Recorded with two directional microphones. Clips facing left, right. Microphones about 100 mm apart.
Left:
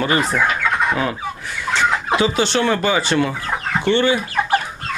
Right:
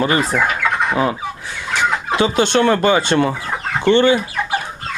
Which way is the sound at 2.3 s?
50° right (ahead or behind).